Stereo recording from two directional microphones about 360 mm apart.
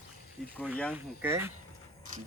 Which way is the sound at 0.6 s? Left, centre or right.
Centre.